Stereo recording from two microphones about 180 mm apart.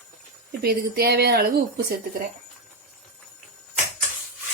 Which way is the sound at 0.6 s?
60° right (ahead or behind).